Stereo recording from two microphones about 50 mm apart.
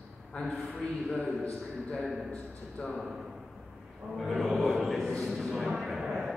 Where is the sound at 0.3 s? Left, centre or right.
Left.